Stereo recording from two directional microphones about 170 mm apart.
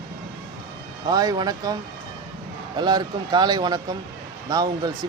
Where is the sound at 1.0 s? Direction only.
20° right (ahead or behind).